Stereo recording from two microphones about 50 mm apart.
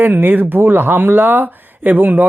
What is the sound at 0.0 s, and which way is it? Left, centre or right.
Speech, right.